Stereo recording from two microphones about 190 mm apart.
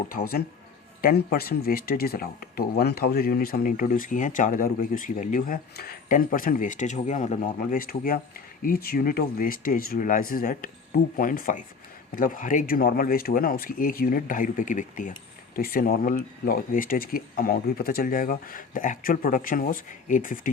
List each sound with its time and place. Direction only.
0.1 s speech: 55° left (ahead or behind)